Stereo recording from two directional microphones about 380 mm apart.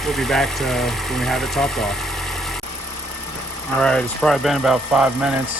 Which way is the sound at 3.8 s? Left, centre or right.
Centre.